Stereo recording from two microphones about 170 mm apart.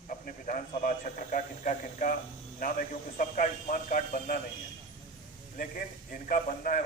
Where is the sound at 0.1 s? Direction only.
50° left (ahead or behind).